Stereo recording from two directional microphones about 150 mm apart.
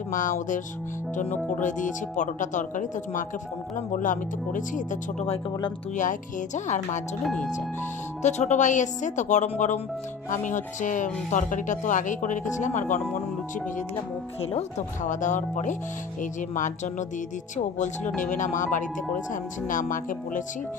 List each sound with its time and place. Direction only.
0.1 s speech: 60° left (ahead or behind)
6.0 s speech: 55° left (ahead or behind)
7.3 s speech: centre (ahead or behind)
8.2 s speech: 50° left (ahead or behind)
14.4 s speech: 40° left (ahead or behind)
15.0 s speech: 55° left (ahead or behind)